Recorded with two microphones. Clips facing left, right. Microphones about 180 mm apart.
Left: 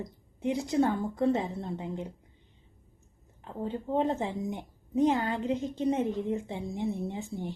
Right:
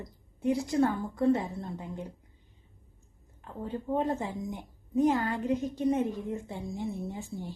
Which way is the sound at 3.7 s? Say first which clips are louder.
Left 1 dB; 20° left (ahead or behind).